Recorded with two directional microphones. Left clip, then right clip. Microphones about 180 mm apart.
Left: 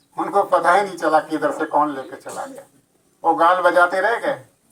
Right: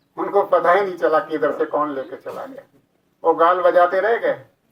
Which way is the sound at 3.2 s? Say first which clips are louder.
Even; 20° right (ahead or behind).